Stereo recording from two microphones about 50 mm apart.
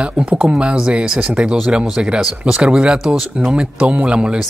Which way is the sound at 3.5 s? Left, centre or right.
Right.